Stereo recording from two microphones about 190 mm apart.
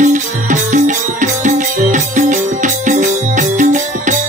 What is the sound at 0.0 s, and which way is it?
Music, 40° right (ahead or behind).